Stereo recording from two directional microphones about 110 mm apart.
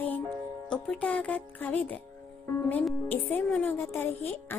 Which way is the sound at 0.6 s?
10° left (ahead or behind).